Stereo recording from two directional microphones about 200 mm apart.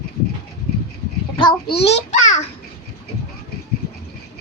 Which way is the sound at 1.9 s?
35° left (ahead or behind).